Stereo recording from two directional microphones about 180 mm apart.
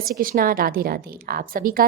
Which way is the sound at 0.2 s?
55° right (ahead or behind).